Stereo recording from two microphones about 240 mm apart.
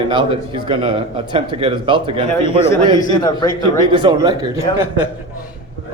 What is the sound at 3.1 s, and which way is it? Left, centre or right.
Speech, centre.